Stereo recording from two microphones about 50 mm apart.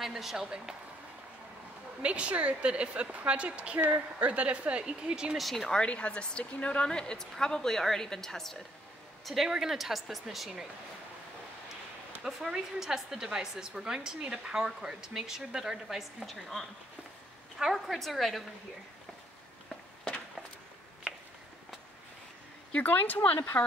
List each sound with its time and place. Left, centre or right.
0.0 s speech: centre
2.0 s a woman's voice: right
4.8 s a woman's voice: centre
5.4 s speech: centre
5.7 s a woman's voice: left
9.2 s speech: centre
12.2 s a woman's voice: centre
17.7 s speech: centre
22.7 s speech: left